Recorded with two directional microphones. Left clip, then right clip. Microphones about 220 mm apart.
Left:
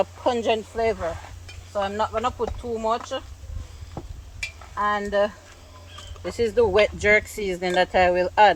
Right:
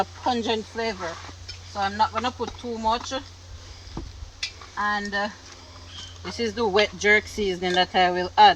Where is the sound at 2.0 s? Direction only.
25° left (ahead or behind).